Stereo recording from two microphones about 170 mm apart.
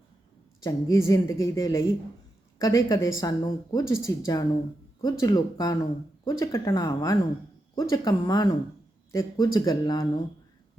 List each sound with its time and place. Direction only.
0.6 s speech: 20° left (ahead or behind)